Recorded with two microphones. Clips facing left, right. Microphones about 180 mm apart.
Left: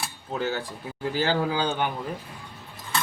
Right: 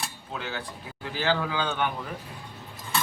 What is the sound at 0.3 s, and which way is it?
A man's voice, 40° left (ahead or behind).